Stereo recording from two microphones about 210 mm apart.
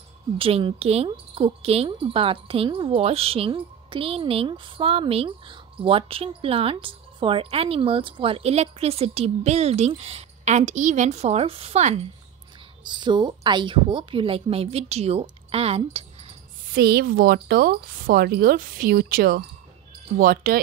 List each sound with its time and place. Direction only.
0.4 s a woman's voice: 25° right (ahead or behind)
16.7 s a woman's voice: 50° right (ahead or behind)